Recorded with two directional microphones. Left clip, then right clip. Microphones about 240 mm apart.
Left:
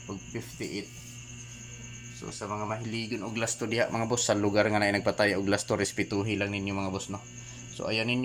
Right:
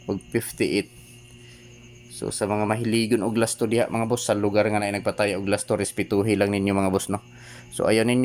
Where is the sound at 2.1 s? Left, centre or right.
Right.